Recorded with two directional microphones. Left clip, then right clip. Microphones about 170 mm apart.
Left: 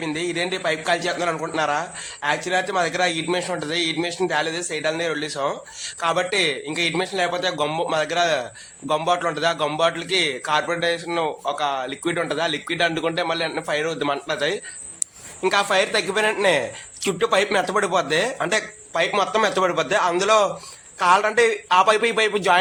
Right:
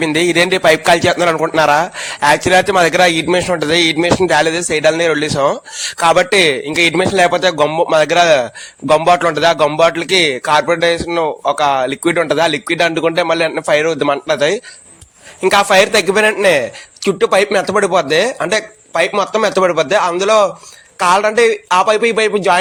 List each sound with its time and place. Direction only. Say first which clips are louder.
0.0 s a man's voice: right 12 dB; 50° right (ahead or behind); by 22.5 s 25° right (ahead or behind)